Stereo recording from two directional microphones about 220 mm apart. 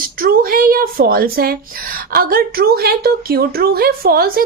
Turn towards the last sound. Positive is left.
turn(degrees=-45)  # may be behind; listen again after turning